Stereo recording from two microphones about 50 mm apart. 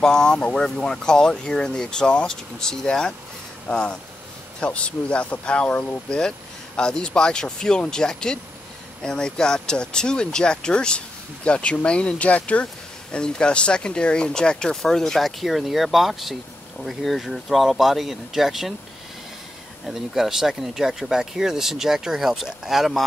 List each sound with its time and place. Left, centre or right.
0.0 s speech: centre
19.9 s speech: centre